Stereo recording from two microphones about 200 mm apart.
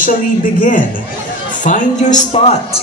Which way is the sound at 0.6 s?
40° left (ahead or behind).